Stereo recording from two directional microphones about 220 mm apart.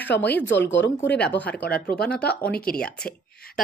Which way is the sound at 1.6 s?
45° left (ahead or behind).